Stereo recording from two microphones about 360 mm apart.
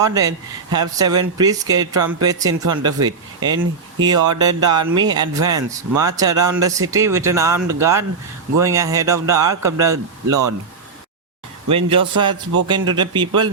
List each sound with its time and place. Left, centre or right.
0.0 s speech: centre
10.2 s speech: right
11.7 s speech: centre